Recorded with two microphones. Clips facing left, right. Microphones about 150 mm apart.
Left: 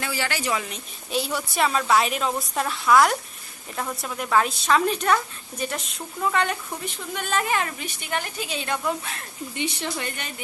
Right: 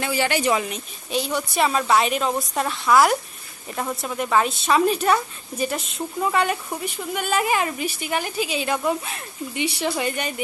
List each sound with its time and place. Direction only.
0.0 s speech: 20° right (ahead or behind)
1.1 s a woman's voice: 5° left (ahead or behind)